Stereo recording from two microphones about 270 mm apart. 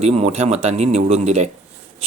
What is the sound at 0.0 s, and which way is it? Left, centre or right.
Speech, right.